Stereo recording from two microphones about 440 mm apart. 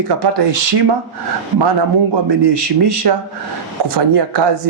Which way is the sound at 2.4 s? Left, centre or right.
Right.